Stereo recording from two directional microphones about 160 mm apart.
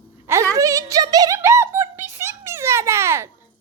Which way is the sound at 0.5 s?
20° right (ahead or behind).